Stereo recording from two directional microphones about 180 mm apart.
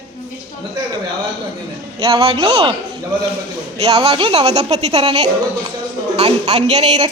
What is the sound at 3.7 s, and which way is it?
A woman's voice, 35° right (ahead or behind).